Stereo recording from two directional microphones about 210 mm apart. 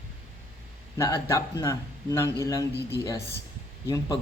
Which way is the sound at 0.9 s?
15° left (ahead or behind).